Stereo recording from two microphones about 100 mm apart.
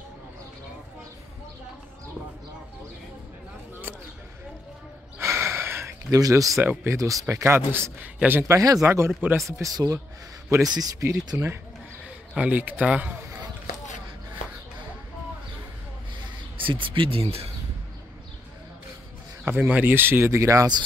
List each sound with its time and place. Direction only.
5.2 s gasp: 25° right (ahead or behind)
6.1 s speech: 35° right (ahead or behind)
6.6 s speech: 20° right (ahead or behind)
7.0 s speech: 35° right (ahead or behind)
8.5 s speech: 35° right (ahead or behind)
12.4 s a man's voice: 15° right (ahead or behind)
16.5 s speech: 60° right (ahead or behind); by 17.5 s 80° right
19.4 s speech: 20° right (ahead or behind); by 20.8 s 40° right (ahead or behind)